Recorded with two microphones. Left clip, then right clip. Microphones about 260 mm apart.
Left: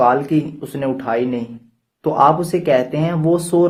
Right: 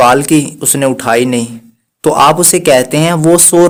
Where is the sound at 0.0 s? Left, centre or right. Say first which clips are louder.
Right 7 dB; right.